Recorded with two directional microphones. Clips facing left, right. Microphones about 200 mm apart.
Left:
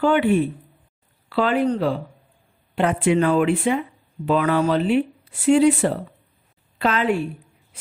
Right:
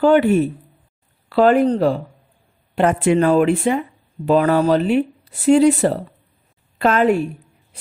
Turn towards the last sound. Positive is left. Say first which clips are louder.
# right 5 dB
turn(degrees=-45)  # may be behind; listen again after turning